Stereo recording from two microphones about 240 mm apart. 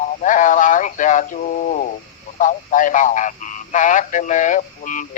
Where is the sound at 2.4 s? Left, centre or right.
Left.